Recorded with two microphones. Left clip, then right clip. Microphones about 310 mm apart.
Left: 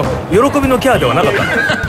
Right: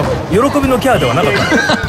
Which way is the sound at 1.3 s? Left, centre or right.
Centre.